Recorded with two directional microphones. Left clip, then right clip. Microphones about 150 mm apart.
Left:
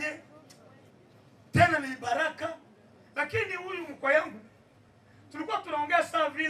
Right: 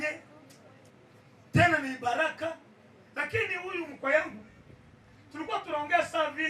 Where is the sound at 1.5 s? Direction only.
30° left (ahead or behind).